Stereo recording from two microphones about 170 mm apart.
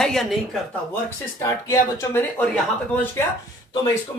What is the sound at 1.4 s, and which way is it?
Speech, 15° left (ahead or behind).